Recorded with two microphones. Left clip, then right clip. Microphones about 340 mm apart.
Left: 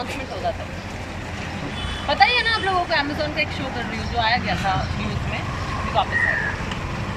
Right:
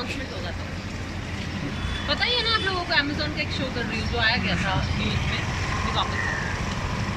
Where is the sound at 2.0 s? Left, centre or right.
Centre.